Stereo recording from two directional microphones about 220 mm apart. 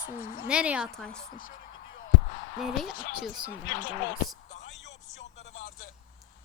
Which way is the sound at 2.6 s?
Centre (ahead or behind).